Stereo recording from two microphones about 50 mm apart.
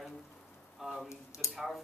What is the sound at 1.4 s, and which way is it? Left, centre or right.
Speech, left.